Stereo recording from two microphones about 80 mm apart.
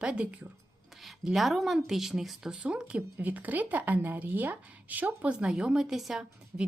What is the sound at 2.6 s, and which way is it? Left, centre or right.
Speech, centre.